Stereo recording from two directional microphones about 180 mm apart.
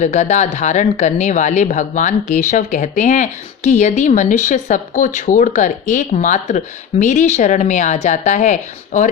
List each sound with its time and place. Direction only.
0.0 s speech: 40° left (ahead or behind)